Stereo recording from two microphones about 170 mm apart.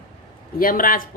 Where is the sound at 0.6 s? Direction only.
55° left (ahead or behind).